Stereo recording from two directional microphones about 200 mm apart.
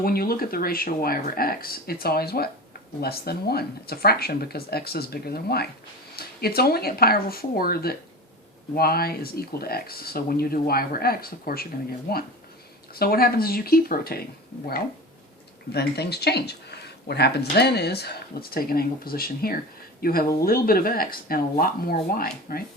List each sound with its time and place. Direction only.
0.0 s speech: 50° left (ahead or behind)
15.7 s speech: 55° left (ahead or behind)